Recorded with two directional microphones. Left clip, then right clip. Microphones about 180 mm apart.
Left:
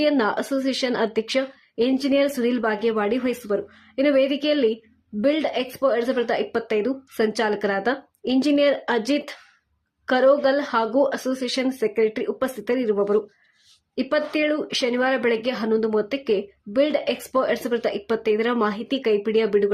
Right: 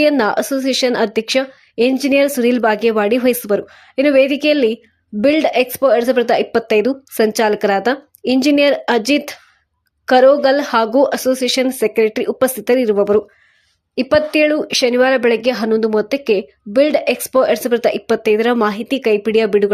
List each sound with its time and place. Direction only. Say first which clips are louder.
0.0 s speech: right 7 dB; 20° right (ahead or behind)